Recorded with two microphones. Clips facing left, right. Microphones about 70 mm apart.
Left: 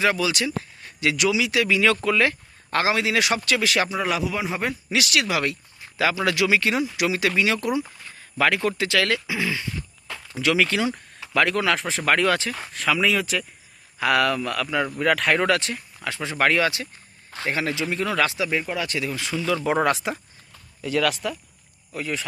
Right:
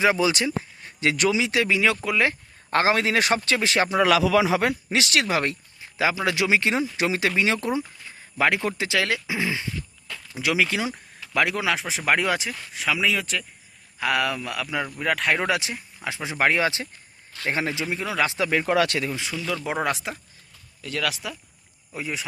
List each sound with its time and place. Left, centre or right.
0.0 s speech: right
2.6 s speech: right
3.8 s a man's voice: right
4.9 s speech: right
6.0 s speech: right; by 15.4 s centre
15.4 s speech: centre
17.8 s speech: centre
18.3 s speech: right
18.7 s a man's voice: right
19.0 s speech: right
19.6 s speech: centre